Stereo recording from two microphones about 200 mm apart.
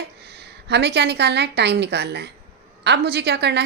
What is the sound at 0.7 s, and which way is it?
Speech, 55° right (ahead or behind).